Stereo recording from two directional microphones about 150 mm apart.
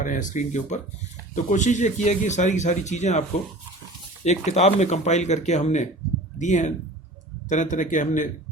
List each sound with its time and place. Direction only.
0.0 s speech: 60° left (ahead or behind)